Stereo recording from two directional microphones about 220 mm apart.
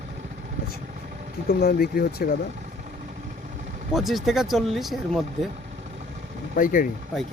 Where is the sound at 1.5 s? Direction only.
45° left (ahead or behind).